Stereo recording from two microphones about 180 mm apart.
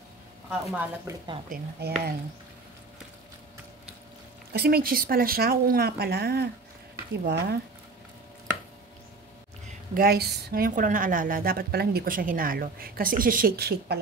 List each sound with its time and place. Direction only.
0.5 s a woman's voice: 5° right (ahead or behind)
1.1 s a woman's voice: 15° right (ahead or behind)
1.5 s speech: 60° right (ahead or behind)
4.5 s speech: 60° right (ahead or behind)
9.9 s a woman's voice: 60° right (ahead or behind)